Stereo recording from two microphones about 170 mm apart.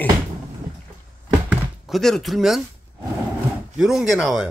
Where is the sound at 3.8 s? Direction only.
Centre (ahead or behind).